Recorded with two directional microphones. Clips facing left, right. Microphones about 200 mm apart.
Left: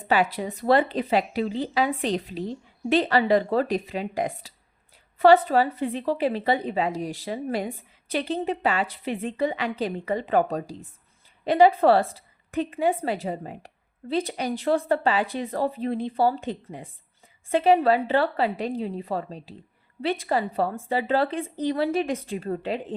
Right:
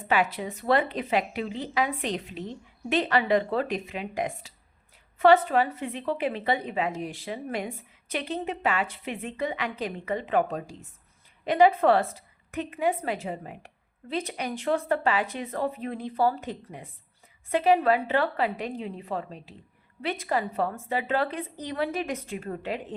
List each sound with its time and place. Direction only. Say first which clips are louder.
0.1 s a woman's voice: left 3 dB; 35° left (ahead or behind)